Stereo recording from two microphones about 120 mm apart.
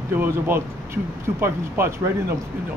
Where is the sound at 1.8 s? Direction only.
20° right (ahead or behind).